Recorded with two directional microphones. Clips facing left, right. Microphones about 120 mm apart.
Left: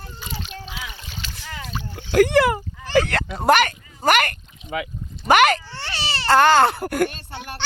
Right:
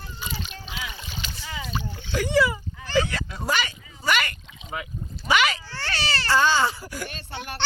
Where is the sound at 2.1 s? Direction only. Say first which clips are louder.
Left 7 dB; 65° left (ahead or behind).